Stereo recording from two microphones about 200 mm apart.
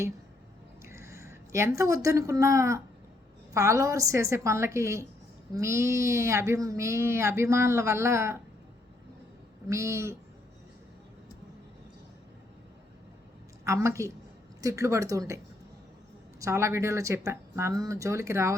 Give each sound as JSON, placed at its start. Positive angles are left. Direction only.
{"t": 0.9, "sound": "speech", "side_deg": -15}
{"t": 9.6, "sound": "speech", "side_deg": -15}
{"t": 13.7, "sound": "speech", "side_deg": -15}
{"t": 16.4, "sound": "speech", "side_deg": -15}